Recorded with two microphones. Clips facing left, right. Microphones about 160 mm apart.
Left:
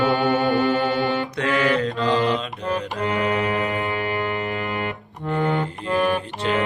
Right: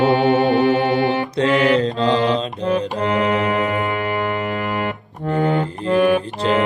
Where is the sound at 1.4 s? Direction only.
25° right (ahead or behind).